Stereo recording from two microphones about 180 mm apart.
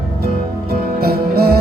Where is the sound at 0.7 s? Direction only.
60° right (ahead or behind).